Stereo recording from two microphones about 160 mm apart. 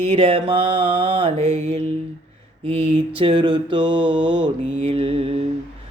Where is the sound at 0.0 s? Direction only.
35° right (ahead or behind).